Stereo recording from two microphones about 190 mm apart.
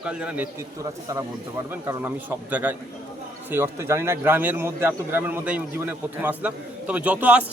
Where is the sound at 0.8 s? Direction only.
15° right (ahead or behind).